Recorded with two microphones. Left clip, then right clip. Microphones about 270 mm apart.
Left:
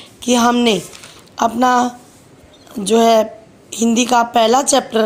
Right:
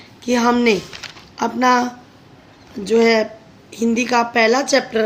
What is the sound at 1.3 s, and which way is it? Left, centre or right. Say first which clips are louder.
Speech: left 2 dB; left.